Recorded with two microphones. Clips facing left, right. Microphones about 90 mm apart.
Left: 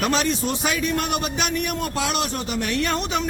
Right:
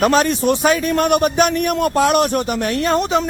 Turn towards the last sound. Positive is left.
turn(degrees=-35)  # may be behind; listen again after turning